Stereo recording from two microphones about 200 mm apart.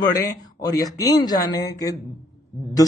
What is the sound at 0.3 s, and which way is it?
A man's voice, 15° left (ahead or behind).